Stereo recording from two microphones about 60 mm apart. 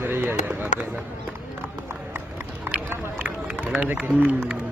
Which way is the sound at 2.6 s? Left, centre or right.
Right.